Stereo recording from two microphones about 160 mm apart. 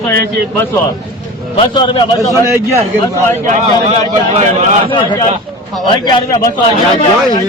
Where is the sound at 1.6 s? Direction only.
30° left (ahead or behind).